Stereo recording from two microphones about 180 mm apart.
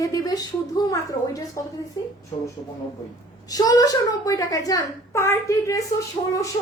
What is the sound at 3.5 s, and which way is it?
A woman's voice, 20° left (ahead or behind).